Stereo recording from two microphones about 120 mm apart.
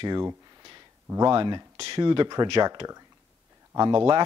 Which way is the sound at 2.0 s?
35° right (ahead or behind).